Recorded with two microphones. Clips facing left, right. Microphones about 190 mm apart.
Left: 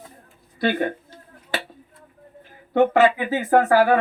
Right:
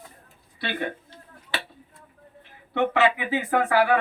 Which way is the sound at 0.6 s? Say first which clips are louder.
Left 8 dB; 45° left (ahead or behind).